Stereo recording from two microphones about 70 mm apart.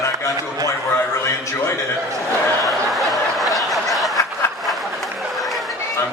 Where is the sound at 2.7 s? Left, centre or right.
Centre.